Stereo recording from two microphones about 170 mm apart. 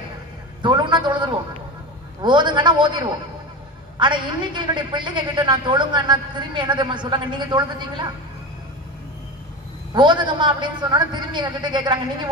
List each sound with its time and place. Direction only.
0.6 s a man's voice: 25° right (ahead or behind)
9.9 s a woman's voice: 25° right (ahead or behind)